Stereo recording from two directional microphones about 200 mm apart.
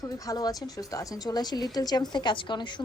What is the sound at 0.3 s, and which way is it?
A woman's voice, 20° left (ahead or behind).